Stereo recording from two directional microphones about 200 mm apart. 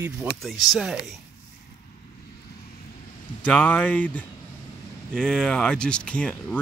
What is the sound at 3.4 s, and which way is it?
Speech, 5° left (ahead or behind).